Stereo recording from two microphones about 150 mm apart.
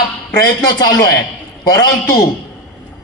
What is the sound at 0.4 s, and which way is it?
A man's voice, 25° left (ahead or behind).